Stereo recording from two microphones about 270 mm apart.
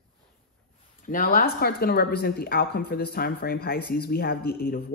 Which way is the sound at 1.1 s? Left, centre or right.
Left.